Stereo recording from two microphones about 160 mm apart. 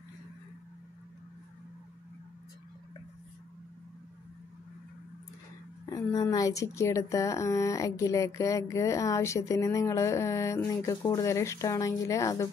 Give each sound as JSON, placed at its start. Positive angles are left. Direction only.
{"t": 5.9, "sound": "a woman's voice", "side_deg": 20}